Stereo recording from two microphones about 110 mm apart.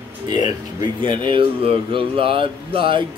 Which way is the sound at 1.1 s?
50° right (ahead or behind).